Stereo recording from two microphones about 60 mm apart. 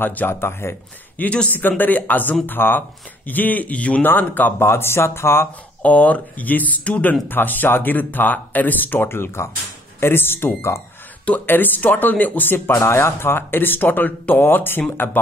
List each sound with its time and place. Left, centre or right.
0.0 s speech: left
0.3 s speech: left
1.1 s speech: left
4.6 s speech: left
5.8 s speech: left
11.2 s speech: left
12.7 s speech: left